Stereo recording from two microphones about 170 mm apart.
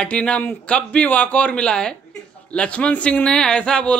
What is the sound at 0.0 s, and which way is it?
A man's voice, 5° left (ahead or behind).